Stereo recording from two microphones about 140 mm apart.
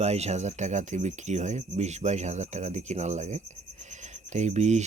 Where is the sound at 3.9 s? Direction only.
55° right (ahead or behind).